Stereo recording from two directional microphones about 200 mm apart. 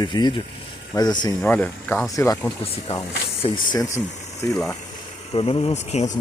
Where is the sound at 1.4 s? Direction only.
10° left (ahead or behind).